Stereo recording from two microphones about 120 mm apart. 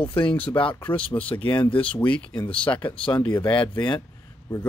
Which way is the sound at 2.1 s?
10° left (ahead or behind).